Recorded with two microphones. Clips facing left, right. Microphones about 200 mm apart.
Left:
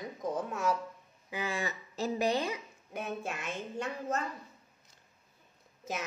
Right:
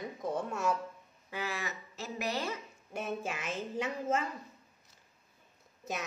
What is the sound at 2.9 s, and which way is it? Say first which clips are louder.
A woman's voice: right 1 dB; centre (ahead or behind).